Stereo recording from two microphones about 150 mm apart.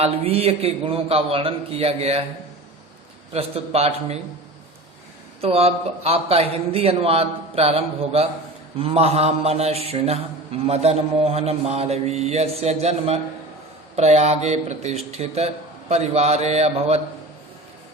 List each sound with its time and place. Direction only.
0.0 s a man's voice: 40° right (ahead or behind)
3.3 s a man's voice: 40° right (ahead or behind)
5.4 s a man's voice: 40° right (ahead or behind)